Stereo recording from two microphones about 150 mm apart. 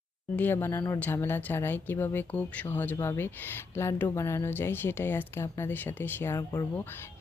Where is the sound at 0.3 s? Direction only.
15° left (ahead or behind).